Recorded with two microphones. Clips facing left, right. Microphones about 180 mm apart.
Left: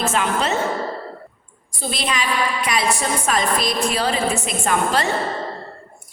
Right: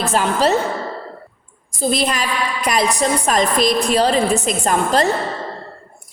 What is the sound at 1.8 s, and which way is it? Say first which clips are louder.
Speech: right 9 dB; 40° right (ahead or behind).